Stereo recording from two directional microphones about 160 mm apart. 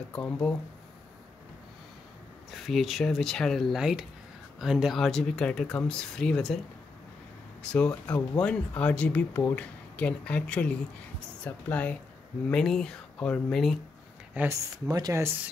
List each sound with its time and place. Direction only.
0.1 s speech: 5° left (ahead or behind)
2.5 s speech: centre (ahead or behind)
7.7 s speech: 10° left (ahead or behind)
14.3 s speech: 10° right (ahead or behind)
14.9 s speech: 25° right (ahead or behind)